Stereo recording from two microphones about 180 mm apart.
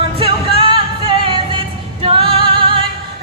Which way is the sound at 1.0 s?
30° right (ahead or behind).